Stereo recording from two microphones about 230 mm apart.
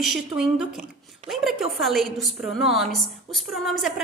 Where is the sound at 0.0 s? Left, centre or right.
Centre.